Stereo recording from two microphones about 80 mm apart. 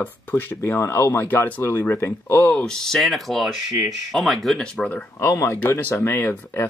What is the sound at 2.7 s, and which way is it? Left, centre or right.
Speech, centre.